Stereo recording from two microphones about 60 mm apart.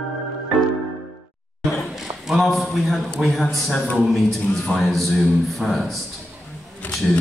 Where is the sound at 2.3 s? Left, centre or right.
Centre.